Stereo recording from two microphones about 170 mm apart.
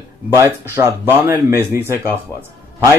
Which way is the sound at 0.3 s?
15° right (ahead or behind).